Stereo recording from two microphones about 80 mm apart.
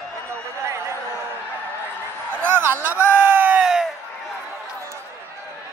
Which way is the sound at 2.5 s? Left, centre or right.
Right.